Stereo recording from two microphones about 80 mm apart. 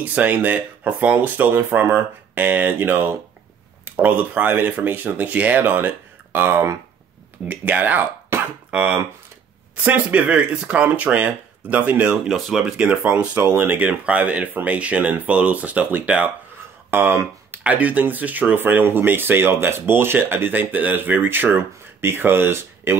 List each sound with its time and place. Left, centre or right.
0.0 s speech: right
12.3 s speech: centre
13.0 s speech: centre
17.6 s speech: centre